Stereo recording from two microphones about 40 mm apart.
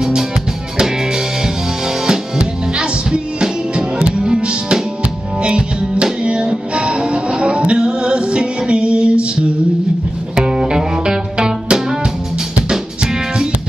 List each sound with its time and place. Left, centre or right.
0.0 s music: centre
10.3 s music: centre